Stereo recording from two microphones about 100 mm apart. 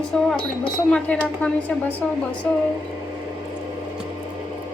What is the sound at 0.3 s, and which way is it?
Speech, 10° left (ahead or behind).